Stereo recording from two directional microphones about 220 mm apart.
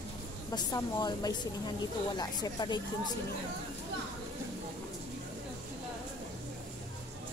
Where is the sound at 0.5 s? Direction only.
20° left (ahead or behind).